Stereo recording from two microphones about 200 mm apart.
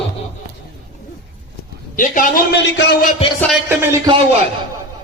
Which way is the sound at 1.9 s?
40° left (ahead or behind).